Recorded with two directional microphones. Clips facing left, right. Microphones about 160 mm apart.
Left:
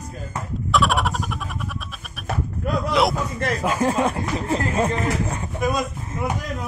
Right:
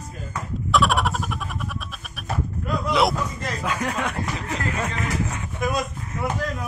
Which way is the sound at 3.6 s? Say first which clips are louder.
Left 6 dB; 35° left (ahead or behind).